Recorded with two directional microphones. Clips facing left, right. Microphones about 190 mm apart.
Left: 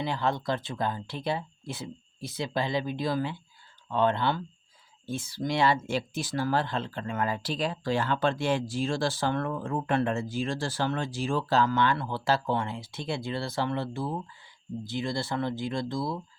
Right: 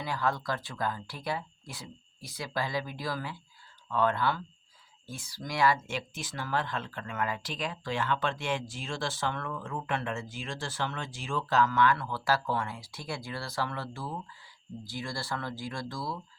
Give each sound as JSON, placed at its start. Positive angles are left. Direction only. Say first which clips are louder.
{"t": 0.0, "sound": "speech", "louder": "left 3 dB", "side_deg": 25}